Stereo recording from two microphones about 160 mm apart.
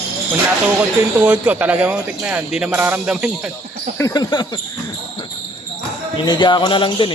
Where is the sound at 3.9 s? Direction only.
20° left (ahead or behind).